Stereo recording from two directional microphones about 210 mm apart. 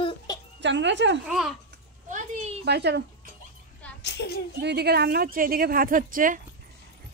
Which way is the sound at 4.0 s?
55° left (ahead or behind).